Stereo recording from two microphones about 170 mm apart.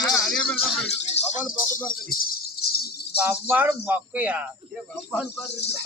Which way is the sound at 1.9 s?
60° left (ahead or behind).